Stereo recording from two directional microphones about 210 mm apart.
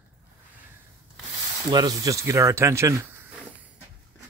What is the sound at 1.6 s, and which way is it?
Speech, 20° right (ahead or behind).